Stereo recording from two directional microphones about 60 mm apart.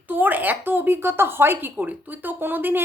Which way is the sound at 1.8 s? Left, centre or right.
Right.